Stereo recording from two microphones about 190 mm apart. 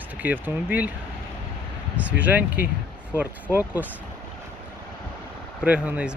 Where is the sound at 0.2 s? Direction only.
10° right (ahead or behind).